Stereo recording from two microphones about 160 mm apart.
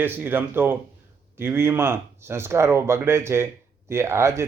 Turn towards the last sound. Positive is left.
turn(degrees=-15)  # may be behind; listen again after turning